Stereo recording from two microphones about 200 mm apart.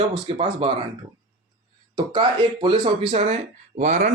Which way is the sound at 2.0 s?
25° right (ahead or behind).